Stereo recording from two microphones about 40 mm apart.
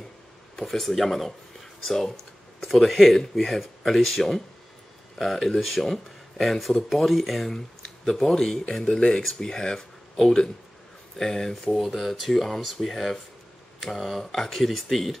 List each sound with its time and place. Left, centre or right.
0.7 s speech: centre
7.5 s a sound: centre
8.2 s speech: centre
8.8 s speech: left; by 15.1 s centre